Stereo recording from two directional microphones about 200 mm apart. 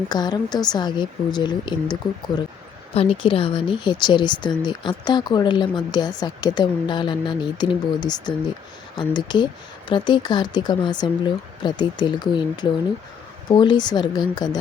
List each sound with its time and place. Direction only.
0.1 s speech: 20° left (ahead or behind)